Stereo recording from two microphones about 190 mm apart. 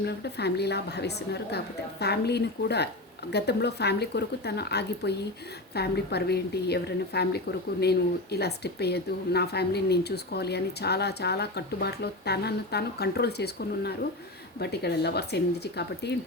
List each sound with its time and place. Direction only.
0.0 s a woman's voice: 60° left (ahead or behind)